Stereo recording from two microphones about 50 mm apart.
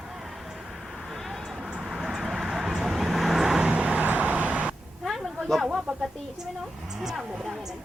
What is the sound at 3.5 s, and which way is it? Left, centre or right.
Vehicle, centre.